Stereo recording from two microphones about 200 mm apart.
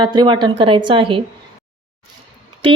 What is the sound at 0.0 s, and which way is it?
Speech, 25° right (ahead or behind).